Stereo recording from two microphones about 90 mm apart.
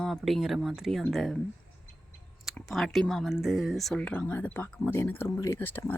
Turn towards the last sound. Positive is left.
turn(degrees=20)  # may be behind; listen again after turning